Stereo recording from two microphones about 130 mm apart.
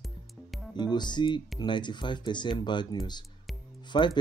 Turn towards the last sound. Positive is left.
turn(degrees=35)  # may be behind; listen again after turning